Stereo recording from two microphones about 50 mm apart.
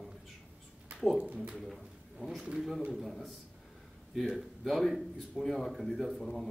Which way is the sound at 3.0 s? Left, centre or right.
Centre.